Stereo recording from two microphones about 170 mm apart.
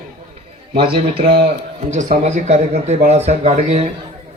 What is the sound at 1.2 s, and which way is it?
Speech, 65° right (ahead or behind).